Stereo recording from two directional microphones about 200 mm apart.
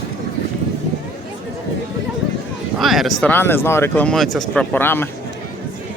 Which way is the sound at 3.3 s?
10° left (ahead or behind).